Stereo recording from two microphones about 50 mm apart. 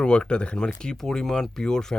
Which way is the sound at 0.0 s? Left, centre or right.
Centre.